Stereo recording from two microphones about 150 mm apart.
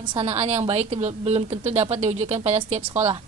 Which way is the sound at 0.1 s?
40° right (ahead or behind).